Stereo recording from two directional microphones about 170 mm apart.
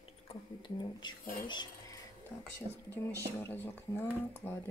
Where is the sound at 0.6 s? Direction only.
25° left (ahead or behind).